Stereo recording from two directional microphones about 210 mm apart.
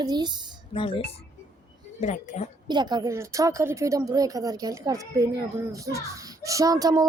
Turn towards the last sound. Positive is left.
turn(degrees=-15)  # may be behind; listen again after turning